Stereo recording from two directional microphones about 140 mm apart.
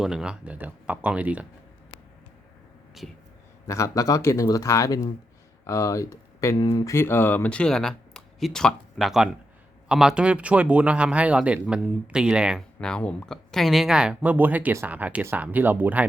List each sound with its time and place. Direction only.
0.0 s a woman's voice: 5° right (ahead or behind)
3.0 s speech: centre (ahead or behind)
3.7 s a woman's voice: 20° left (ahead or behind); by 12.6 s 5° right (ahead or behind)
12.8 s a woman's voice: 5° left (ahead or behind); by 16.0 s 10° right (ahead or behind)